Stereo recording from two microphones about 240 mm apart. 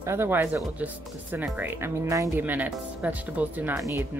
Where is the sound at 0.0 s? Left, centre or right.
Centre.